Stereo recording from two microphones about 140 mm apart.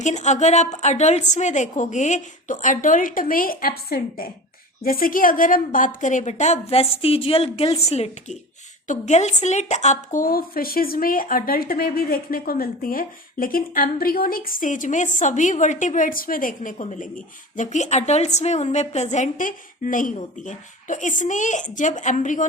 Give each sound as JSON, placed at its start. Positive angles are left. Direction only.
{"t": 0.0, "sound": "a woman's voice", "side_deg": 55}